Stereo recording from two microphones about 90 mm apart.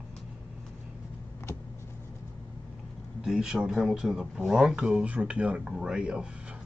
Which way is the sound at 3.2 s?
5° right (ahead or behind).